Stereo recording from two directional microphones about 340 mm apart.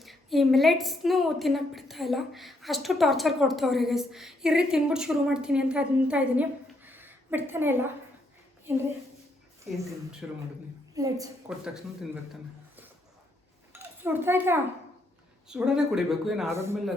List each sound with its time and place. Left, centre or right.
0.0 s a woman's voice: centre
9.6 s a woman's voice: centre
13.7 s a woman's voice: centre